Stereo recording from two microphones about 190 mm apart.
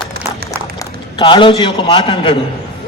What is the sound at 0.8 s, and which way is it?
A man's voice, 25° left (ahead or behind).